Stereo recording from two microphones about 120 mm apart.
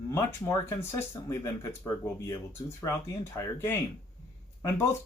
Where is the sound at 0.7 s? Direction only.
25° left (ahead or behind).